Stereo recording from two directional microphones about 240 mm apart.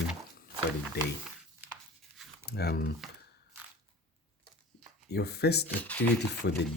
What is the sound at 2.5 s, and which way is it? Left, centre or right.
Speech, left.